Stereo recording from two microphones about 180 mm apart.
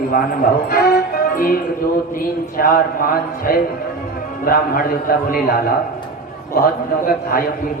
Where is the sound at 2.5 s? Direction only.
50° left (ahead or behind).